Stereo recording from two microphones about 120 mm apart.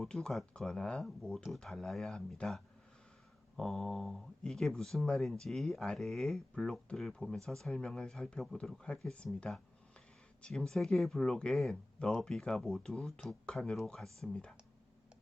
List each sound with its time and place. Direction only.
0.0 s speech: 5° left (ahead or behind)
3.6 s speech: centre (ahead or behind)